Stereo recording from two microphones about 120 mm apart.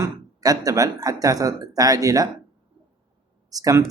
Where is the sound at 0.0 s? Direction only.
30° right (ahead or behind).